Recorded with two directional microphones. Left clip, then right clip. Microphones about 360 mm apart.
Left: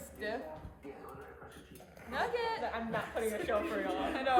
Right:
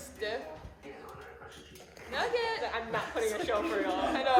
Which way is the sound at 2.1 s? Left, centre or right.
Right.